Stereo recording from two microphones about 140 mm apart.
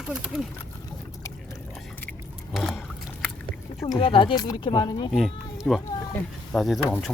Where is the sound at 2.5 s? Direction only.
5° left (ahead or behind).